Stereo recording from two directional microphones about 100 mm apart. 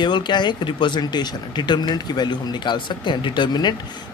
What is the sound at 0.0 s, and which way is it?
Speech, 50° left (ahead or behind).